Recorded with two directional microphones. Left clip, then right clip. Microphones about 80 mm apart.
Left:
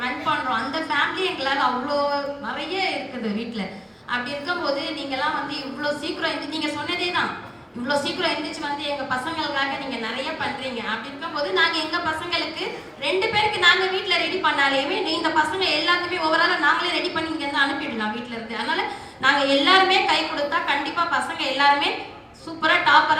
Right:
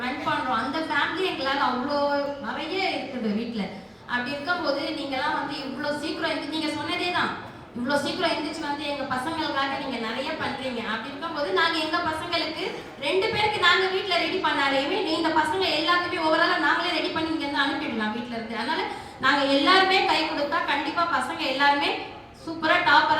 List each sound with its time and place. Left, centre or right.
0.0 s a sound: left
4.1 s a woman's voice: left
5.8 s a woman's voice: left
11.3 s a woman's voice: left
19.2 s a woman's voice: left